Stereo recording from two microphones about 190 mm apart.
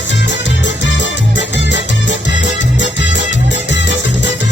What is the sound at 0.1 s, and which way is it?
Music, 70° left (ahead or behind).